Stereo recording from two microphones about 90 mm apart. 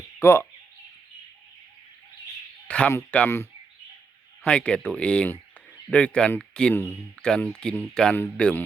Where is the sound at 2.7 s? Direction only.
10° left (ahead or behind).